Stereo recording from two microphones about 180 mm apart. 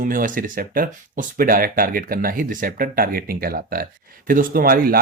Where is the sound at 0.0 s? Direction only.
50° right (ahead or behind).